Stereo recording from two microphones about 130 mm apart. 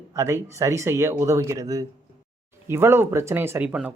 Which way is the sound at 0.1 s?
25° right (ahead or behind).